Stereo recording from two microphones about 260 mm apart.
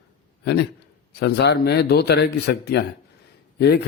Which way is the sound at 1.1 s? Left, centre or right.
Left.